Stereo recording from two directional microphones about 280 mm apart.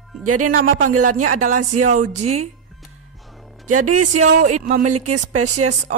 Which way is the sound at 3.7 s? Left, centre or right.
Right.